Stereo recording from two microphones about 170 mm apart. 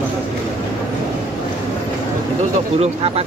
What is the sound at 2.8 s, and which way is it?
Speech, 35° right (ahead or behind).